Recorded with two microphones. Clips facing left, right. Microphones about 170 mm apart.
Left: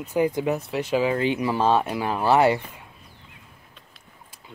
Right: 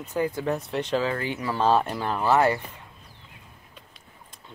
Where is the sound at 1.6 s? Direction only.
5° left (ahead or behind).